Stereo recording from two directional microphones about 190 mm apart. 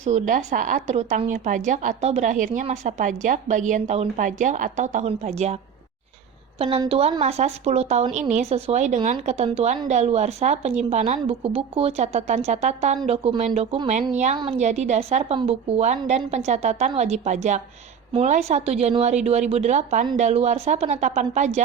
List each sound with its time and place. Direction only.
0.0 s speech: 40° right (ahead or behind)
6.6 s speech: 30° right (ahead or behind)